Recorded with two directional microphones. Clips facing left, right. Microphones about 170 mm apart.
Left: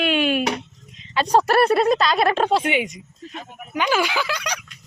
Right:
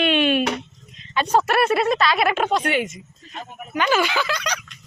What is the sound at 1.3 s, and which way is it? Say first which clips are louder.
Speech: left 2 dB; 35° left (ahead or behind).